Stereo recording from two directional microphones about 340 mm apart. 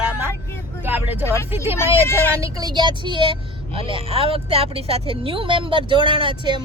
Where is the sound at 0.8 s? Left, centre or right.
Centre.